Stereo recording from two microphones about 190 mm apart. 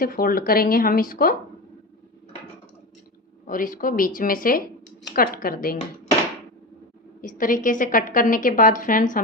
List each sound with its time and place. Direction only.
0.0 s a woman's voice: 50° left (ahead or behind)
3.4 s a woman's voice: 45° left (ahead or behind)
7.2 s a woman's voice: 45° left (ahead or behind)